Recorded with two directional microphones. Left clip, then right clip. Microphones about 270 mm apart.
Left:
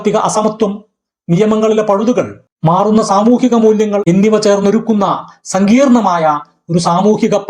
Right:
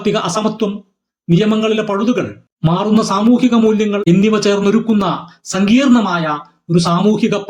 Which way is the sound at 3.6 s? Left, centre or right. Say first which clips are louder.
Left 4 dB; centre.